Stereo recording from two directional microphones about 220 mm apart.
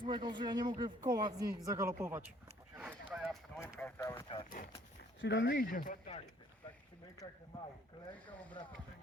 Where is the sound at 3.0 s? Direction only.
Centre (ahead or behind).